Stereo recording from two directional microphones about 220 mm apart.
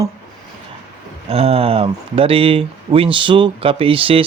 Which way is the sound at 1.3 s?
25° right (ahead or behind).